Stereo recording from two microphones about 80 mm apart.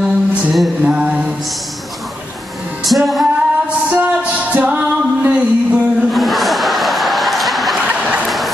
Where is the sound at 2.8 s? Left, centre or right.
Centre.